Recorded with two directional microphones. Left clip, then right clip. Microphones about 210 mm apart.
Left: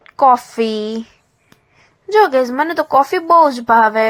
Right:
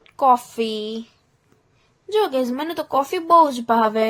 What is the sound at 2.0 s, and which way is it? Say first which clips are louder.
A woman's voice: left 8 dB; 25° left (ahead or behind).